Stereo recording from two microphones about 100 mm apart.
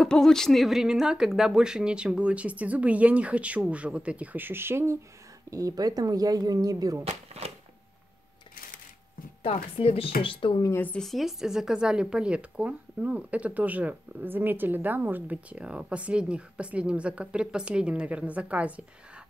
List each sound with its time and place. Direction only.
0.0 s a woman's voice: 5° left (ahead or behind); by 4.9 s 25° right (ahead or behind)
5.5 s speech: 35° right (ahead or behind)
7.3 s a sound: 90° right
9.4 s speech: 75° left (ahead or behind); by 10.6 s 60° left (ahead or behind)
11.0 s a woman's voice: centre (ahead or behind)